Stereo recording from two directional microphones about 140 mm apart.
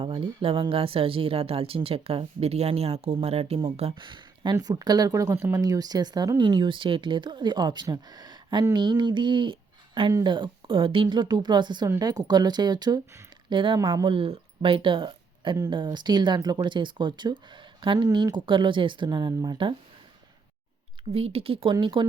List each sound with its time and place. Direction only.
0.0 s speech: 40° right (ahead or behind)
3.9 s speech: 35° right (ahead or behind)
14.1 s speech: 40° right (ahead or behind)
21.1 s speech: 45° right (ahead or behind)